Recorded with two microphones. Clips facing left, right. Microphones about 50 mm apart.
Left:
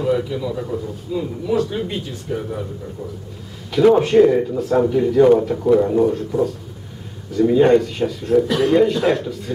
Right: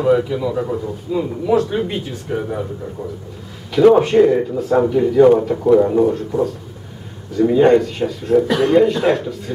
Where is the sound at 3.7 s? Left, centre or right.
Centre.